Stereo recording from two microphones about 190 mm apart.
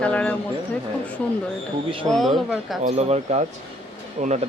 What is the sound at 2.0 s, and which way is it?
Speech, centre (ahead or behind).